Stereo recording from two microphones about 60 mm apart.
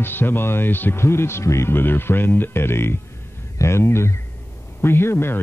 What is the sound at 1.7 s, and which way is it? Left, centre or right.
Speech, left.